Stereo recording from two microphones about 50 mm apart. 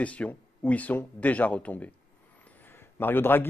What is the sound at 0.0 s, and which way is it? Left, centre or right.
A man's voice, left.